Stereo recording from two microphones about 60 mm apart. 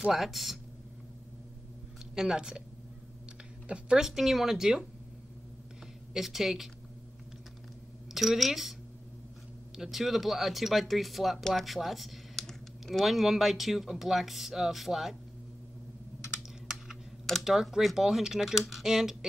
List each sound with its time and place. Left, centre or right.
0.1 s speech: centre
2.1 s speech: centre
3.6 s speech: centre
4.0 s speech: centre
6.1 s speech: centre
8.1 s speech: centre
9.8 s speech: centre
16.4 s computer keyboard: centre
17.5 s speech: centre